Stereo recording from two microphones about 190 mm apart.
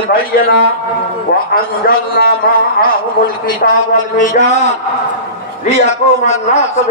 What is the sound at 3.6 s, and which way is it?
A man's voice, 50° left (ahead or behind).